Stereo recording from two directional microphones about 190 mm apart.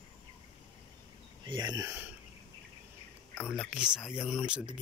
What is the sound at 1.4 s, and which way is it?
Speech, 25° right (ahead or behind).